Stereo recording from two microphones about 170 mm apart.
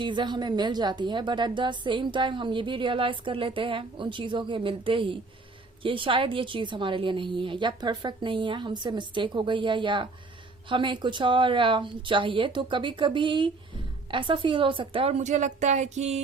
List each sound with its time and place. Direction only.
0.0 s a woman's voice: 30° right (ahead or behind)